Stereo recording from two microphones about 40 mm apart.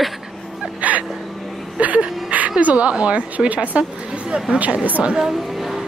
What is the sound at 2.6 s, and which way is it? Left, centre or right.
A woman's voice, right.